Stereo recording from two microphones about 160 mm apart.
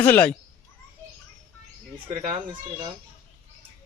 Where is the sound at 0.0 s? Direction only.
10° left (ahead or behind).